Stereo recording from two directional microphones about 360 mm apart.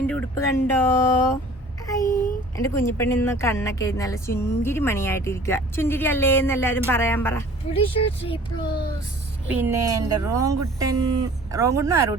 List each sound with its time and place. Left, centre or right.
0.1 s speech: centre
9.5 s speech: centre